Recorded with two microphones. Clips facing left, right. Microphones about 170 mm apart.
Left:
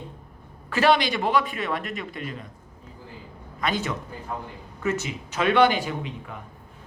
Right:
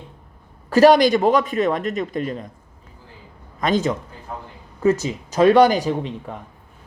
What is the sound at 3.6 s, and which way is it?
Speech, 45° right (ahead or behind).